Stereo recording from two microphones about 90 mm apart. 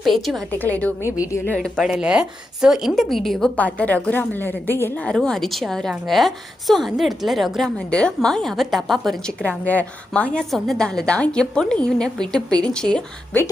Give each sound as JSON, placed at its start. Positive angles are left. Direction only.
{"t": 0.0, "sound": "a woman's voice", "side_deg": 0}
{"t": 0.6, "sound": "a woman's voice", "side_deg": 15}
{"t": 1.5, "sound": "a woman's voice", "side_deg": 5}
{"t": 1.9, "sound": "a woman's voice", "side_deg": -10}
{"t": 3.5, "sound": "a woman's voice", "side_deg": 15}
{"t": 5.0, "sound": "a woman's voice", "side_deg": 10}
{"t": 7.8, "sound": "a woman's voice", "side_deg": 10}
{"t": 9.4, "sound": "a woman's voice", "side_deg": 15}